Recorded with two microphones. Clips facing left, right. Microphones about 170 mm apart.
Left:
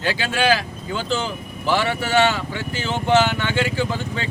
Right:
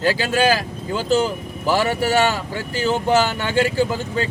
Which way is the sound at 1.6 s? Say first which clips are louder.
Right 3 dB; 40° right (ahead or behind).